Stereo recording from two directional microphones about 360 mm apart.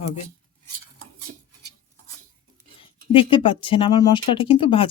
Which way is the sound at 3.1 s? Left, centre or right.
Centre.